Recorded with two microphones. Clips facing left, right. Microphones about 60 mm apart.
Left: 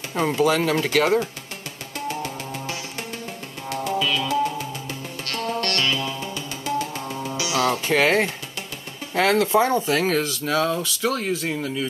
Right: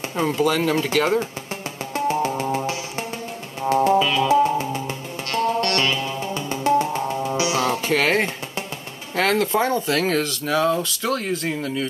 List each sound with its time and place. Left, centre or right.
0.3 s speech: centre
0.7 s speech: right
2.0 s music: right
7.9 s speech: centre
9.4 s speech: centre
10.0 s speech: centre